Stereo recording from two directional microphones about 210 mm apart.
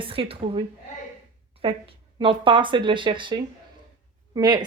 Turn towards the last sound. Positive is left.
turn(degrees=-20)  # may be behind; listen again after turning